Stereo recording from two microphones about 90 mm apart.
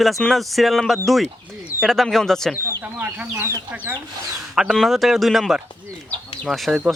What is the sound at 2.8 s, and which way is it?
Speech, 20° right (ahead or behind).